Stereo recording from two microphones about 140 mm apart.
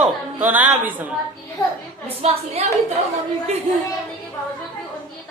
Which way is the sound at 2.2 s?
50° right (ahead or behind).